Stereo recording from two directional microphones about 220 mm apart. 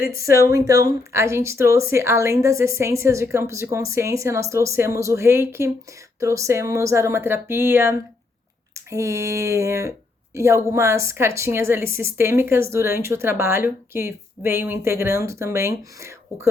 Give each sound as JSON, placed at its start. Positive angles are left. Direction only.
{"t": 0.2, "sound": "speech", "side_deg": 45}
{"t": 0.5, "sound": "a woman's voice", "side_deg": -15}